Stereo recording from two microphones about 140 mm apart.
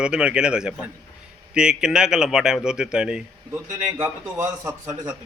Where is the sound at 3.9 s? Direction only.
15° right (ahead or behind).